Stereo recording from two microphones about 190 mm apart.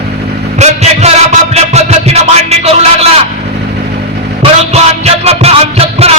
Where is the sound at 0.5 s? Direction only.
35° right (ahead or behind).